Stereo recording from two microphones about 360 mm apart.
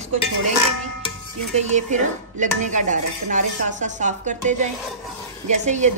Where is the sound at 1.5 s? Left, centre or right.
Centre.